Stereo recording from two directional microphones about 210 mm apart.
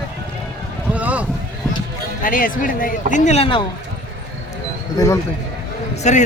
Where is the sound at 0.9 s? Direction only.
5° right (ahead or behind).